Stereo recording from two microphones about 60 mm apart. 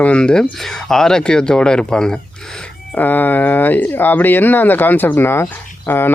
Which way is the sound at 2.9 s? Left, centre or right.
Left.